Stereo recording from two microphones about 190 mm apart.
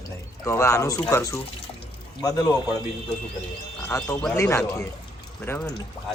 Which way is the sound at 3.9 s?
15° left (ahead or behind).